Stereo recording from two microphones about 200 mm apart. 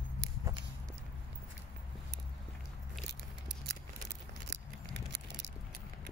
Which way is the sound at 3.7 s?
55° right (ahead or behind).